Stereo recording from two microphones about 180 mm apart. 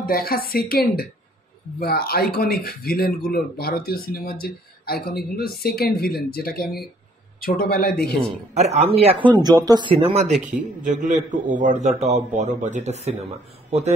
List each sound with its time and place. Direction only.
0.0 s speech: 55° left (ahead or behind)
8.5 s speech: 35° right (ahead or behind)
9.4 s a man's voice: 20° right (ahead or behind)